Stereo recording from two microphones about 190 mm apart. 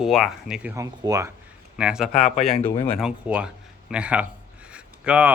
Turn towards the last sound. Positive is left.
turn(degrees=-5)  # may be behind; listen again after turning